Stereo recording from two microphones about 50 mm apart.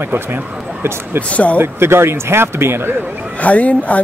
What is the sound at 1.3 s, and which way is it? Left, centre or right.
Speech, left.